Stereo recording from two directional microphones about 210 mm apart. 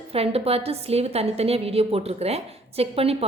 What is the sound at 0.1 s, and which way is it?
A woman's voice, 30° right (ahead or behind).